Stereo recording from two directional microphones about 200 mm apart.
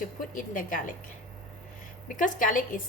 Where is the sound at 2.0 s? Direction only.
40° left (ahead or behind).